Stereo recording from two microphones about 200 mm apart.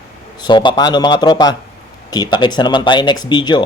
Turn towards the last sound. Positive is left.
turn(degrees=20)  # may be behind; listen again after turning